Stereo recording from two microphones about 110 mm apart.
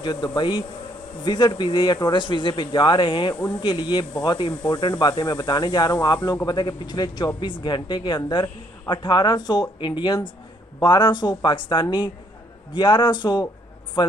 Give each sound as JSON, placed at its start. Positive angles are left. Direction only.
{"t": 0.0, "sound": "a woman's voice", "side_deg": 40}